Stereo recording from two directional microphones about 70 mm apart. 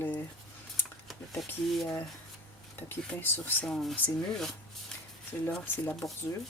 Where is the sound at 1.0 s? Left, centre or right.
Centre.